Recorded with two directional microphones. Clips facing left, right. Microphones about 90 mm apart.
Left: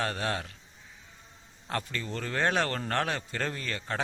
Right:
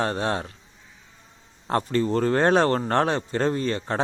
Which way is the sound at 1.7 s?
35° right (ahead or behind).